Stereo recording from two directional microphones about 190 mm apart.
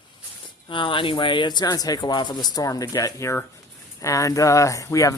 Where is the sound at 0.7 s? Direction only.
25° left (ahead or behind).